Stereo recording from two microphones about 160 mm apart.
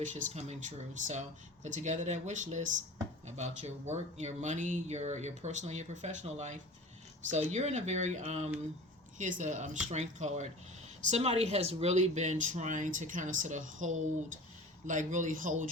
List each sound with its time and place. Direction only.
0.1 s speech: 50° right (ahead or behind)